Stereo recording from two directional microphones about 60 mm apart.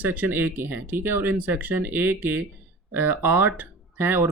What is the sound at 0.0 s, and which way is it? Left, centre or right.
Speech, right.